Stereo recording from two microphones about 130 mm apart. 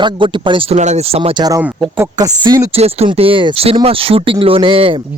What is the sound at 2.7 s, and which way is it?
Speech, 55° right (ahead or behind).